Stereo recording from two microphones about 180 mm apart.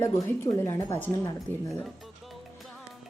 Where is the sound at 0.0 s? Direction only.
15° left (ahead or behind).